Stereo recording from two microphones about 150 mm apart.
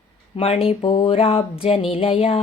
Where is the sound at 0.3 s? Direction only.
40° left (ahead or behind).